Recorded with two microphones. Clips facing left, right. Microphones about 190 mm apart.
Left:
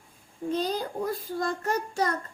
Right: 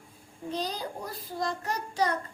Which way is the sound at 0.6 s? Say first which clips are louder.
Left 6 dB; 50° left (ahead or behind).